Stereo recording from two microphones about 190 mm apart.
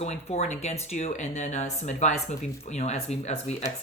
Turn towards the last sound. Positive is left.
turn(degrees=35)  # may be behind; listen again after turning